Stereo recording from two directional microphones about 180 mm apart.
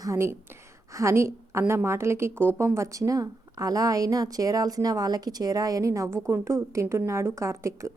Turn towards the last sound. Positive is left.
turn(degrees=-15)  # may be behind; listen again after turning